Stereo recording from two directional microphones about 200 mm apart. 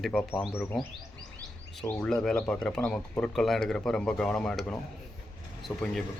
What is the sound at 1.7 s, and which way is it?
Speech, 5° left (ahead or behind).